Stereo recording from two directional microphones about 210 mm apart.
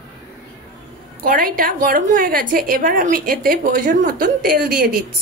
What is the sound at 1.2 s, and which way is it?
A woman's voice, 40° right (ahead or behind).